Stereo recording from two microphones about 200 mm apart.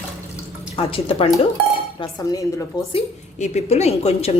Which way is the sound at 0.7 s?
25° left (ahead or behind).